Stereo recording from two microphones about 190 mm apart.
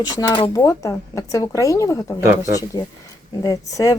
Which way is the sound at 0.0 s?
20° left (ahead or behind).